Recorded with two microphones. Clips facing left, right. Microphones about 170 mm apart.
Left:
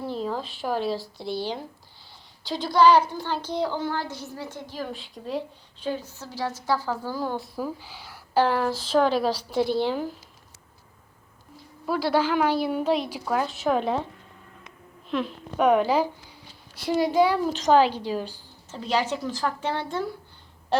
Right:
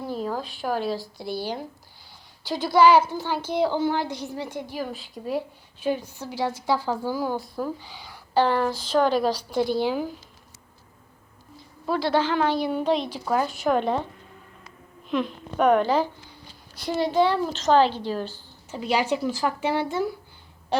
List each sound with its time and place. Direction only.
0.0 s speech: 5° right (ahead or behind)
2.5 s a woman's voice: 5° right (ahead or behind)
11.9 s a woman's voice: 5° left (ahead or behind)
15.1 s a woman's voice: centre (ahead or behind)
18.7 s a woman's voice: 10° right (ahead or behind)